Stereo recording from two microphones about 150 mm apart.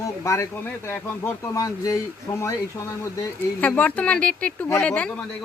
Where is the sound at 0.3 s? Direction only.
15° left (ahead or behind).